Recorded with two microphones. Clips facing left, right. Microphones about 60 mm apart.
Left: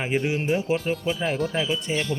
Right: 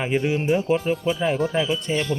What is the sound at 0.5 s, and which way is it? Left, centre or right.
Music, centre.